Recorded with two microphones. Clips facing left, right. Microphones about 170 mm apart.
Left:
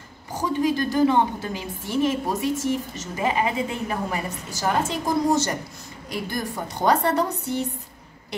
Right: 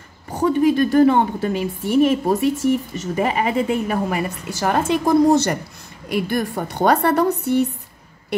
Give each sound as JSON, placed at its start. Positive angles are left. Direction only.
{"t": 0.3, "sound": "a woman's voice", "side_deg": -60}